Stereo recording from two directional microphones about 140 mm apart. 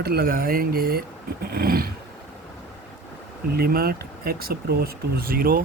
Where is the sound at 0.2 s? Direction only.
90° right.